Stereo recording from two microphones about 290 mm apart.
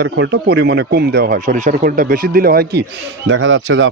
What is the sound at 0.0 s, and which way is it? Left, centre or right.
Speech, right.